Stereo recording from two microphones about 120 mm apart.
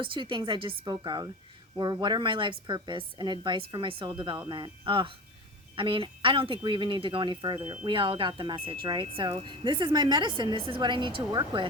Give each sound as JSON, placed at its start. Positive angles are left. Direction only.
{"t": 0.0, "sound": "a woman's voice", "side_deg": -45}